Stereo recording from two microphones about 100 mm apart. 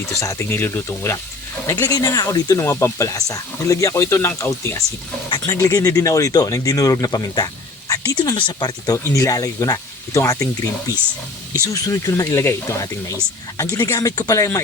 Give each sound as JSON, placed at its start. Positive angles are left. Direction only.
{"t": 0.2, "sound": "speech", "side_deg": 30}
{"t": 8.2, "sound": "speech", "side_deg": 50}
{"t": 9.0, "sound": "speech", "side_deg": 35}